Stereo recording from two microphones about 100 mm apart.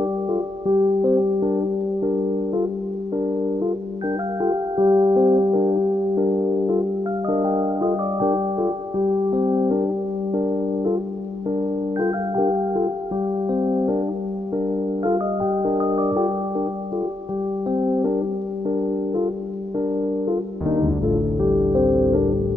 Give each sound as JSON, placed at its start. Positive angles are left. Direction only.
{"t": 0.3, "sound": "music", "side_deg": -45}
{"t": 4.4, "sound": "music", "side_deg": -35}
{"t": 9.5, "sound": "music", "side_deg": -45}
{"t": 12.0, "sound": "organ", "side_deg": -35}
{"t": 13.5, "sound": "music", "side_deg": -35}
{"t": 15.0, "sound": "music", "side_deg": -35}
{"t": 17.6, "sound": "music", "side_deg": -50}
{"t": 18.7, "sound": "music", "side_deg": -35}
{"t": 21.4, "sound": "music", "side_deg": -35}